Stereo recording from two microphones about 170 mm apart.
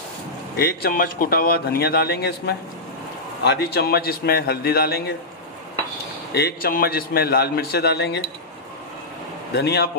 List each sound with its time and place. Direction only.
0.6 s a man's voice: 65° left (ahead or behind)
6.3 s a man's voice: 65° left (ahead or behind)
9.5 s a man's voice: 75° left (ahead or behind)